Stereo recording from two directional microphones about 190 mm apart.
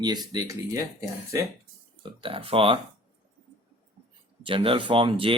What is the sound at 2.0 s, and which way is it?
Speech, 30° right (ahead or behind).